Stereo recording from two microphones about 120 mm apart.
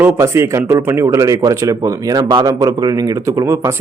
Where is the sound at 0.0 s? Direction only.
25° right (ahead or behind).